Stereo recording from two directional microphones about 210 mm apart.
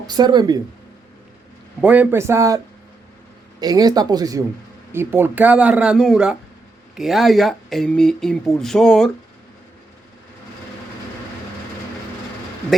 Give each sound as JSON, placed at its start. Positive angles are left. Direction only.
{"t": 0.1, "sound": "speech", "side_deg": -20}
{"t": 1.8, "sound": "speech", "side_deg": -5}
{"t": 3.6, "sound": "speech", "side_deg": -20}